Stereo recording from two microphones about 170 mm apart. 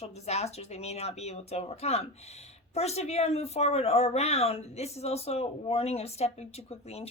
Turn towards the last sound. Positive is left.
turn(degrees=40)  # may be behind; listen again after turning